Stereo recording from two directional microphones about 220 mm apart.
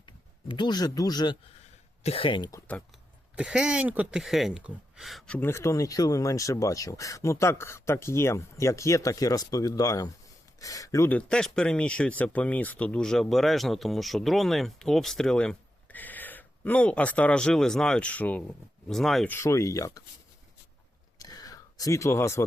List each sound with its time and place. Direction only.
0.0 s speech: 20° left (ahead or behind)
3.3 s speech: 5° right (ahead or behind); by 20.0 s 15° left (ahead or behind)
21.2 s a sound: 15° left (ahead or behind)